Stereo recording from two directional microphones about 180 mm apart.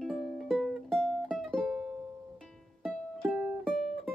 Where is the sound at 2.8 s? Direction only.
Centre (ahead or behind).